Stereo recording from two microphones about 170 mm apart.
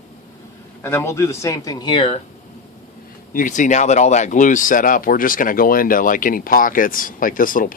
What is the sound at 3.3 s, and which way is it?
Speech, 50° left (ahead or behind).